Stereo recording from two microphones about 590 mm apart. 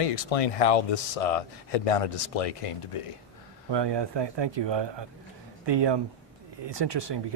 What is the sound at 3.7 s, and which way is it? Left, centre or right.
Speech, right.